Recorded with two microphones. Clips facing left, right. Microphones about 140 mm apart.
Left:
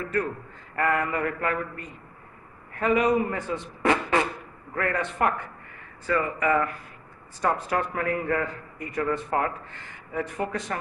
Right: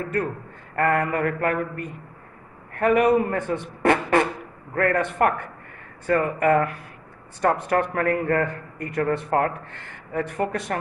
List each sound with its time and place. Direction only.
0.7 s mantra: 45° right (ahead or behind)
2.7 s a man's voice: 55° right (ahead or behind)
3.3 s a sound: 55° right (ahead or behind)
4.7 s speech: 55° right (ahead or behind)